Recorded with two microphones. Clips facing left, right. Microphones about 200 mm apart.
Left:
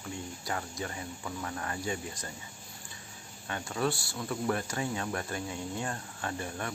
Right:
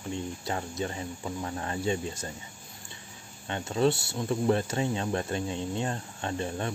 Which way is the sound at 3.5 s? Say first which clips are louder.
Right 6 dB; 25° right (ahead or behind).